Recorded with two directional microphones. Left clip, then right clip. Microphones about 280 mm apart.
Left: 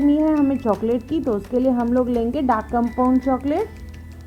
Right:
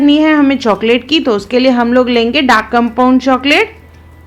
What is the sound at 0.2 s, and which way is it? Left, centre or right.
Speech, right.